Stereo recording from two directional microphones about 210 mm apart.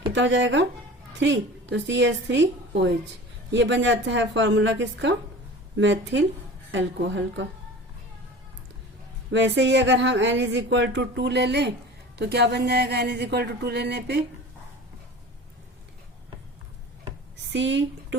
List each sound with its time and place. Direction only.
0.1 s speech: 60° right (ahead or behind)
9.3 s speech: 55° right (ahead or behind)
17.5 s speech: 60° right (ahead or behind)